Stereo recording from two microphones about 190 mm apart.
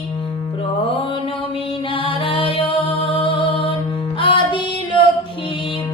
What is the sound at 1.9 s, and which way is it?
Music, 30° left (ahead or behind).